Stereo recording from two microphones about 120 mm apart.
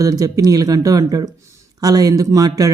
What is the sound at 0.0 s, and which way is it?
Speech, 30° right (ahead or behind).